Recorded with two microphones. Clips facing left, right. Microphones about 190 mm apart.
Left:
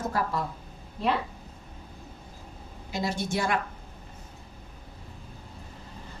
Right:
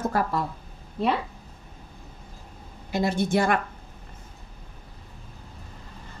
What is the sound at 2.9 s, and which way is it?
Speech, 55° right (ahead or behind).